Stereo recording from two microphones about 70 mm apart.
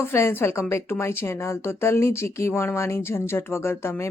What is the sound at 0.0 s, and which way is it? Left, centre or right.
Speech, left.